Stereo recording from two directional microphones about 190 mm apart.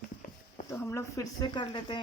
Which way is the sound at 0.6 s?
15° left (ahead or behind).